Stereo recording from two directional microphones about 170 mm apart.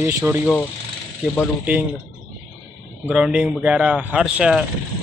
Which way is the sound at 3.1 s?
5° right (ahead or behind).